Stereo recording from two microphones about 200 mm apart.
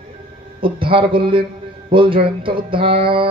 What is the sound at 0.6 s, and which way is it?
Music, 25° right (ahead or behind).